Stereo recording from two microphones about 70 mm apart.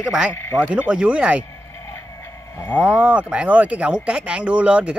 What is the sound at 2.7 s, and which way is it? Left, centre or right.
Speech, centre.